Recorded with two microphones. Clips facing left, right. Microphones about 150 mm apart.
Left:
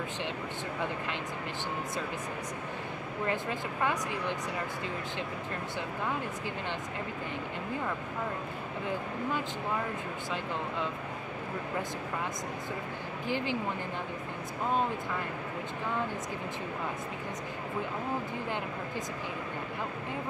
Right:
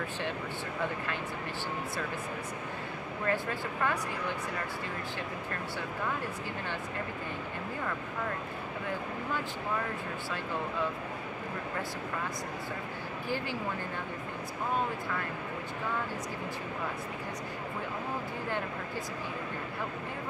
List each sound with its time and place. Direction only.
3.3 s speech: 20° left (ahead or behind)